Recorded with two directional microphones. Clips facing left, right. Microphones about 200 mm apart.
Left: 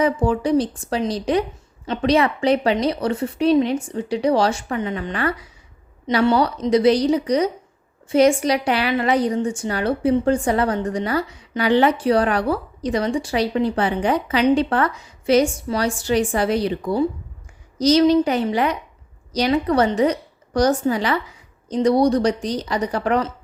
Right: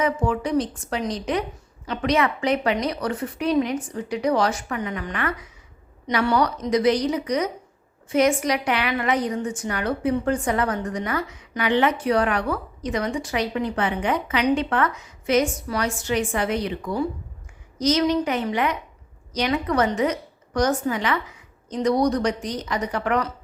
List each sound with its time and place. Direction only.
0.0 s a woman's voice: 35° left (ahead or behind)